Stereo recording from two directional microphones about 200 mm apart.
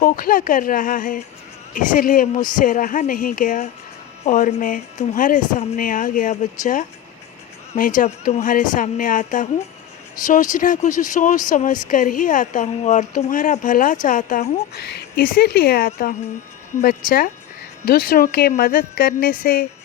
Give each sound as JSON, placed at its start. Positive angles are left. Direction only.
{"t": 0.0, "sound": "a woman's voice", "side_deg": 45}
{"t": 7.7, "sound": "a woman's voice", "side_deg": 40}